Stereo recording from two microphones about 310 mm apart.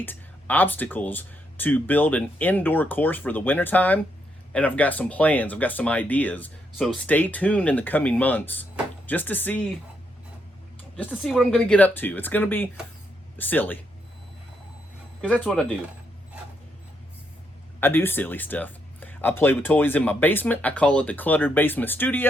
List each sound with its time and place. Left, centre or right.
0.0 s speech: centre
10.9 s speech: centre
15.2 s speech: centre
17.7 s speech: centre